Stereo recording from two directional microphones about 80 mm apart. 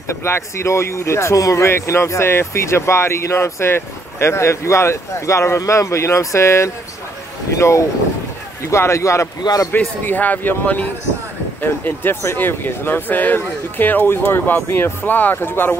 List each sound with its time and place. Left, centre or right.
0.2 s speech: left
9.4 s a man's voice: left
9.7 s speech: left